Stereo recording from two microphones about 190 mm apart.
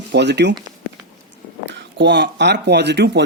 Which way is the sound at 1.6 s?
65° right (ahead or behind).